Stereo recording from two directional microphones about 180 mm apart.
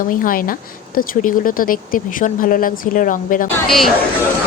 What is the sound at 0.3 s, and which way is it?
Speech, 50° left (ahead or behind).